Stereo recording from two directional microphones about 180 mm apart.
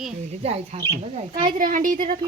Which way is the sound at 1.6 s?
50° right (ahead or behind).